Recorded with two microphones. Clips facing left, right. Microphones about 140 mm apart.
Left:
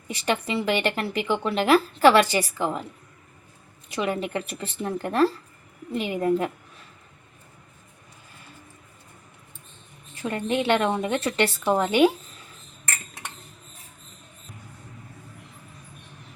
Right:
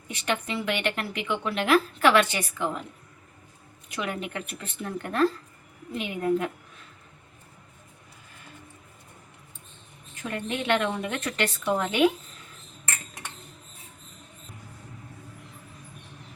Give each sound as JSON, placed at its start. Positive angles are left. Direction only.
{"t": 0.1, "sound": "speech", "side_deg": 35}
{"t": 3.8, "sound": "speech", "side_deg": 30}
{"t": 10.2, "sound": "speech", "side_deg": 30}